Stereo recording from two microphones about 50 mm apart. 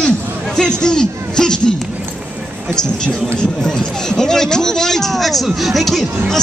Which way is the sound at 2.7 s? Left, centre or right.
Centre.